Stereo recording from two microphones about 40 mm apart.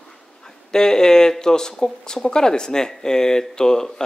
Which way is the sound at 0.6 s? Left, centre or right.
Centre.